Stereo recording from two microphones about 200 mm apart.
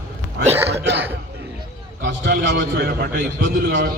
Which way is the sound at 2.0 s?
65° right (ahead or behind).